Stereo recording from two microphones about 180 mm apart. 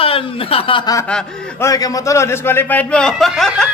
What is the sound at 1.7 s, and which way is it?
A man's voice, 20° left (ahead or behind).